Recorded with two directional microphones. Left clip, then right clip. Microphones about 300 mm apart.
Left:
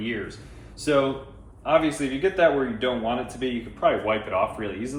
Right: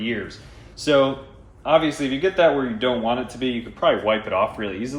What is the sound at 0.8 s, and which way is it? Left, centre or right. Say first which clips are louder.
Speech: right 4 dB; right.